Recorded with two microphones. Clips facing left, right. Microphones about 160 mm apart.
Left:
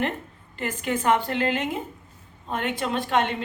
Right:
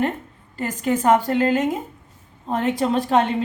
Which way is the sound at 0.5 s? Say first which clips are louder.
Right 5 dB; 40° right (ahead or behind).